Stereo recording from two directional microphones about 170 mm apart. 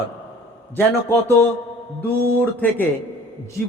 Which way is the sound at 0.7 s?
10° left (ahead or behind).